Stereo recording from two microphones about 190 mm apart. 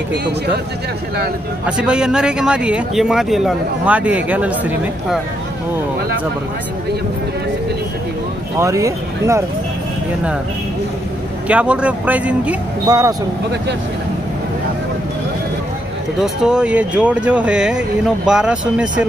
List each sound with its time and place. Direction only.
1.8 s speech: 5° right (ahead or behind)
8.5 s speech: 15° right (ahead or behind)
11.4 s speech: 5° right (ahead or behind)
12.8 s speech: 20° right (ahead or behind)
16.2 s speech: 5° right (ahead or behind)